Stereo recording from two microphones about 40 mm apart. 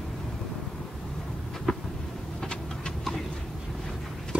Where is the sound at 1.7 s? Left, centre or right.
Centre.